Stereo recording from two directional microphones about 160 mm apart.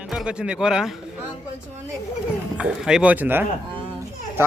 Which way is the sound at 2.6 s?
5° right (ahead or behind).